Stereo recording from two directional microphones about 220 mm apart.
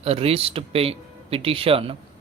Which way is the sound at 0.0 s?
25° right (ahead or behind).